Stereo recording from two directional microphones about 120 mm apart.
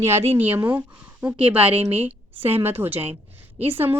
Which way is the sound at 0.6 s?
15° right (ahead or behind).